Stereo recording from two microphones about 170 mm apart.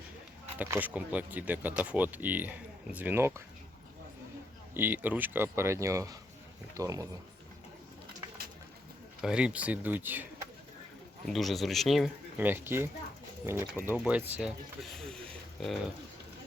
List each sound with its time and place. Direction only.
0.6 s speech: 10° right (ahead or behind)
4.7 s speech: 10° right (ahead or behind)
9.2 s speech: 5° right (ahead or behind)
11.3 s speech: centre (ahead or behind)
14.8 s speech: 5° left (ahead or behind)